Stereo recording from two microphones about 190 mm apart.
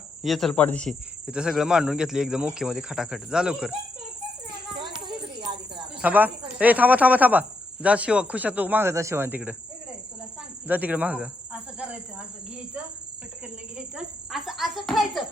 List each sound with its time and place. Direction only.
0.2 s a man's voice: centre (ahead or behind)
1.3 s a man's voice: 5° right (ahead or behind)
5.0 s music: 25° right (ahead or behind)
6.0 s speech: 10° right (ahead or behind)
10.7 s speech: 10° right (ahead or behind)
13.7 s a man's voice: 5° right (ahead or behind)